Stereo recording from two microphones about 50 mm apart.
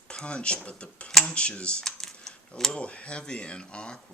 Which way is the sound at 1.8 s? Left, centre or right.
Centre.